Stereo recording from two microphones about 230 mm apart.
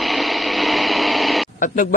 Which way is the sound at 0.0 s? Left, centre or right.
Centre.